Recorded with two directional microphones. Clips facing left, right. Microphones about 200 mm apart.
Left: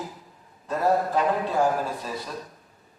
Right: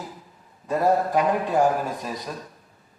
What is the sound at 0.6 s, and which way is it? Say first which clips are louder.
A man's voice: right 2 dB; 10° right (ahead or behind).